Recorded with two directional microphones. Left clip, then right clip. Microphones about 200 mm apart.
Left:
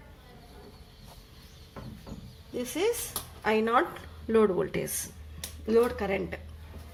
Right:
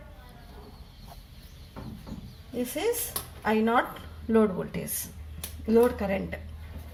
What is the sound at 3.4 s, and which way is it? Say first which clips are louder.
A woman's voice: even; 40° left (ahead or behind).